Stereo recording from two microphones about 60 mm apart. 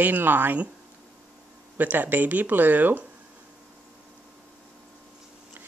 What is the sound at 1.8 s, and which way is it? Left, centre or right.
Speech, right.